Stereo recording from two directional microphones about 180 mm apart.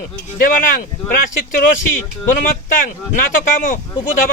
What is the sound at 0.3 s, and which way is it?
Speech, 50° left (ahead or behind).